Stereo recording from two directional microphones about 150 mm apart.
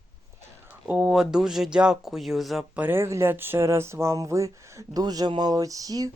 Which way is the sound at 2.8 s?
15° right (ahead or behind).